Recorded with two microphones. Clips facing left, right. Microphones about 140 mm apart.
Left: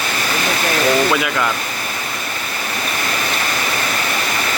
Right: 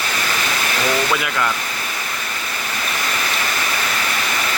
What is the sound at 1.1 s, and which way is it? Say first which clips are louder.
Speech: left 3 dB; 5° left (ahead or behind).